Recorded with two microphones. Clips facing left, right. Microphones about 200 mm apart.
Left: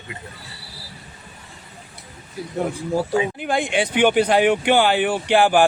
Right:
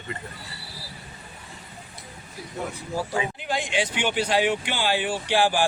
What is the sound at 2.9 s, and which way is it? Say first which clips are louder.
Speech: left 6 dB; 55° left (ahead or behind).